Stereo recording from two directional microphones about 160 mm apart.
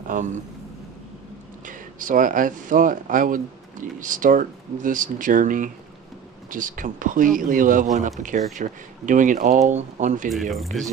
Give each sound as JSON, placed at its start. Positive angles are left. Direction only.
{"t": 0.1, "sound": "a man's voice", "side_deg": -50}
{"t": 1.7, "sound": "speech", "side_deg": -55}
{"t": 10.5, "sound": "speech", "side_deg": 0}